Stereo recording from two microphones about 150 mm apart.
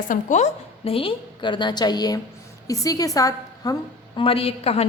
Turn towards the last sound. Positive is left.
turn(degrees=40)  # may be behind; listen again after turning